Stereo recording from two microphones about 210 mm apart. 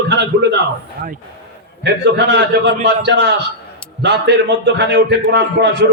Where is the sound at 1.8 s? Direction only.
55° right (ahead or behind).